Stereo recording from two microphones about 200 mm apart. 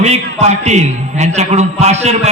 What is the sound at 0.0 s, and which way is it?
A man's voice, 35° right (ahead or behind).